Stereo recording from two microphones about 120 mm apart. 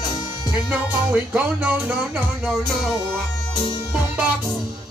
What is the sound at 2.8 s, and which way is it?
Music, 5° left (ahead or behind).